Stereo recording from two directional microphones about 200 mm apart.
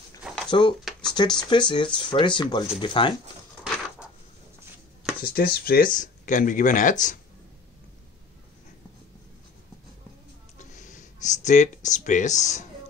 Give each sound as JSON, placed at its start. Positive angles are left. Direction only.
{"t": 0.5, "sound": "speech", "side_deg": 25}
{"t": 3.6, "sound": "coin", "side_deg": -5}
{"t": 5.2, "sound": "speech", "side_deg": 50}
{"t": 10.6, "sound": "a sound", "side_deg": 40}